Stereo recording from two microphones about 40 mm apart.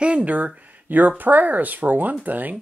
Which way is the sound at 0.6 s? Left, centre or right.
Right.